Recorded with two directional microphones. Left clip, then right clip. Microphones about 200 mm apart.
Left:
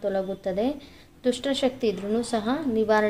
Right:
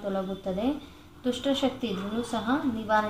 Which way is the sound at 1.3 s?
50° left (ahead or behind).